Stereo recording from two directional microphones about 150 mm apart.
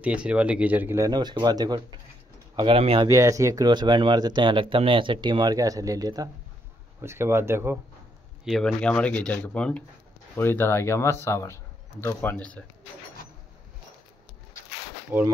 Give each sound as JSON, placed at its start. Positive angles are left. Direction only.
{"t": 0.0, "sound": "speech", "side_deg": -5}
{"t": 3.1, "sound": "speech", "side_deg": -20}
{"t": 8.5, "sound": "speech", "side_deg": 5}
{"t": 15.0, "sound": "speech", "side_deg": -15}